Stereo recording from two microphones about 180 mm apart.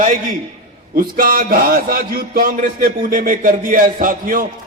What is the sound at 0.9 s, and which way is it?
A man's voice, 50° right (ahead or behind).